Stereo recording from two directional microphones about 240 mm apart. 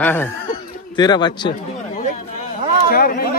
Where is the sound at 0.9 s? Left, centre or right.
Centre.